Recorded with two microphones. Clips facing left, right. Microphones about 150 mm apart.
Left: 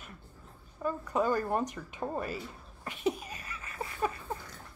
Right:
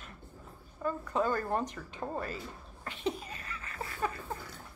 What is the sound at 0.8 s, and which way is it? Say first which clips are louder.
Speech: left 1 dB; 10° left (ahead or behind).